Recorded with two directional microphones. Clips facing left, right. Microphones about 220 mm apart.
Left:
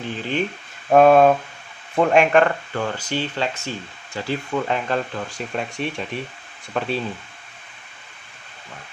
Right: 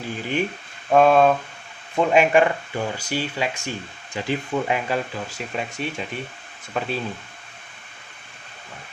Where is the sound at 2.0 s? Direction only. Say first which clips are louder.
Left 1 dB; 5° right (ahead or behind).